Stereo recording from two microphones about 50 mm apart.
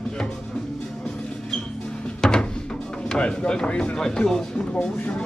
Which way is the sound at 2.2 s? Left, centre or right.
Centre.